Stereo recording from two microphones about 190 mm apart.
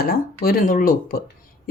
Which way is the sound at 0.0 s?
50° left (ahead or behind).